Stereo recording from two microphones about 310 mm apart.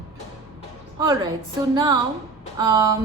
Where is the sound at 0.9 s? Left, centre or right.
Centre.